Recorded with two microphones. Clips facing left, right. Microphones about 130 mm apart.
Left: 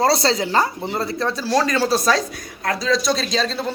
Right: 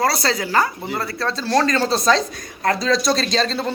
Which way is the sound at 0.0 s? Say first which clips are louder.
Left 3 dB; 25° left (ahead or behind).